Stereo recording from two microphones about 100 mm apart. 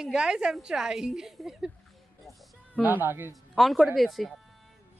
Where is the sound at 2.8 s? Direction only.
20° right (ahead or behind).